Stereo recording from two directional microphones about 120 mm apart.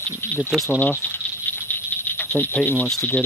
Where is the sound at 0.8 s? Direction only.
15° left (ahead or behind).